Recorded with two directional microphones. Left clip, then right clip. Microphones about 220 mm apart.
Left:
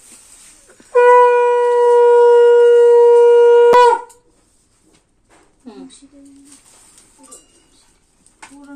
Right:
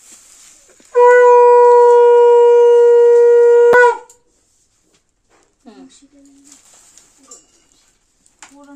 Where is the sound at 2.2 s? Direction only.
10° right (ahead or behind).